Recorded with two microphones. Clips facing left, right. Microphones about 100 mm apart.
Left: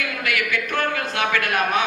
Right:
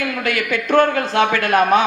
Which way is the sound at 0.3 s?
35° right (ahead or behind).